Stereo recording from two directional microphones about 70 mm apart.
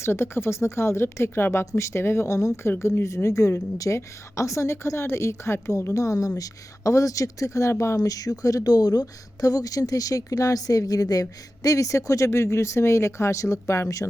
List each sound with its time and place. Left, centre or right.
0.0 s speech: left